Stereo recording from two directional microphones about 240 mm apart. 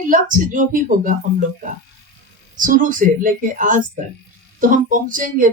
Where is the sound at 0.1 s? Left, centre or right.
Right.